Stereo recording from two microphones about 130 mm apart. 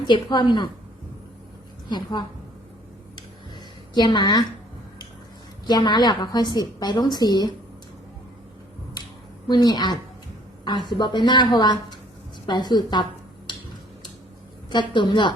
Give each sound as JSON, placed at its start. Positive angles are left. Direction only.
{"t": 0.0, "sound": "a woman's voice", "side_deg": 35}
{"t": 1.9, "sound": "a woman's voice", "side_deg": 35}
{"t": 3.9, "sound": "a woman's voice", "side_deg": 35}
{"t": 5.6, "sound": "a woman's voice", "side_deg": 30}
{"t": 9.5, "sound": "a woman's voice", "side_deg": 30}
{"t": 13.5, "sound": "tick-tock", "side_deg": 35}
{"t": 14.7, "sound": "a woman's voice", "side_deg": 35}